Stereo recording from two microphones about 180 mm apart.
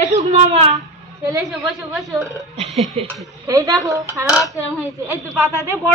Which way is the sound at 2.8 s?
35° right (ahead or behind).